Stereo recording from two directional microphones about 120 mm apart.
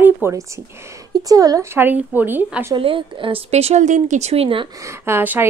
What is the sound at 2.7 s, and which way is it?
Speech, 45° right (ahead or behind).